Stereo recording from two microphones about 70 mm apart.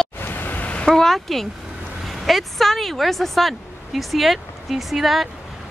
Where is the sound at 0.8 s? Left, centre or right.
Centre.